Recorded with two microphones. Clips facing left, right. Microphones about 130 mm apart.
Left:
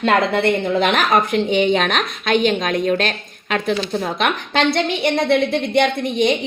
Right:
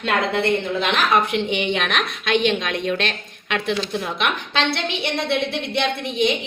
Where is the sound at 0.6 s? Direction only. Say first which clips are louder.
Left 4 dB; 50° left (ahead or behind).